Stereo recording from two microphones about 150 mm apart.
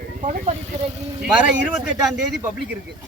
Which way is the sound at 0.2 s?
50° right (ahead or behind).